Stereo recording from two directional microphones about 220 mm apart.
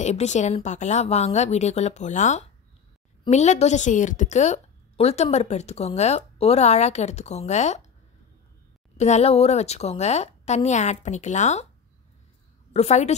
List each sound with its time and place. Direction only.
0.0 s a woman's voice: 30° left (ahead or behind)
8.9 s a woman's voice: 30° left (ahead or behind)
12.7 s a woman's voice: 30° left (ahead or behind)